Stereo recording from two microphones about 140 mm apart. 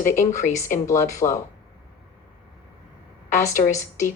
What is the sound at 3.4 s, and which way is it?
Speech, 20° left (ahead or behind).